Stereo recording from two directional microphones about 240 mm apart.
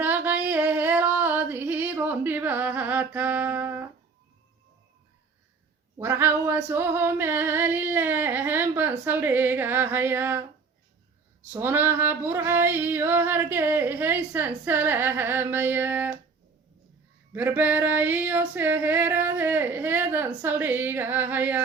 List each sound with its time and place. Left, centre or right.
0.0 s a sound: centre
6.0 s female singing: centre
11.4 s female singing: centre
17.3 s female singing: centre